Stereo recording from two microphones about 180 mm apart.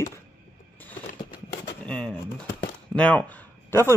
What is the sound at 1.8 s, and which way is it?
A man's voice, 5° left (ahead or behind).